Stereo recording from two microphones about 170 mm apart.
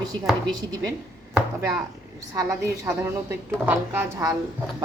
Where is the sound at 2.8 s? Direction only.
15° right (ahead or behind).